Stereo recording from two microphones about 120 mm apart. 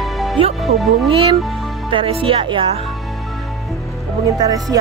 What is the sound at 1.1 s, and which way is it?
Speech, 45° right (ahead or behind).